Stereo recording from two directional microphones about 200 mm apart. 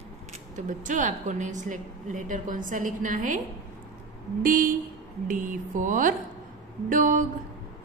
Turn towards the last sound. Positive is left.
turn(degrees=-40)  # may be behind; listen again after turning